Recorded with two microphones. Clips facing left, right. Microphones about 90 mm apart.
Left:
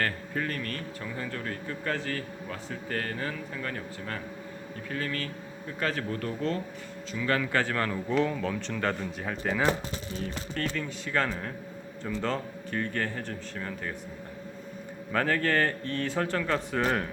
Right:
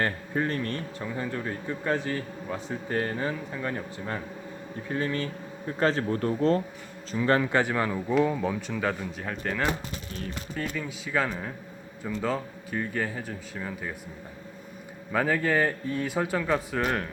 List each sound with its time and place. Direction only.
0.0 s speech: 25° right (ahead or behind); by 9.7 s 5° left (ahead or behind)
10.2 s speech: 10° right (ahead or behind)
15.1 s speech: 10° right (ahead or behind)